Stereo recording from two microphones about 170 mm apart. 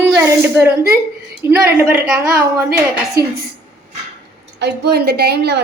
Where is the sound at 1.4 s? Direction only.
15° right (ahead or behind).